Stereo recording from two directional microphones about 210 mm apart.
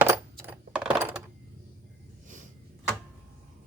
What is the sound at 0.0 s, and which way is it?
Coin, 10° right (ahead or behind).